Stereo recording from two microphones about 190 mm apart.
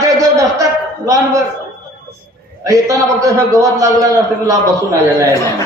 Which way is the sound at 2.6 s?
15° right (ahead or behind).